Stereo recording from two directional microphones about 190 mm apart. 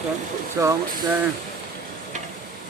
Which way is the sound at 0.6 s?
15° right (ahead or behind).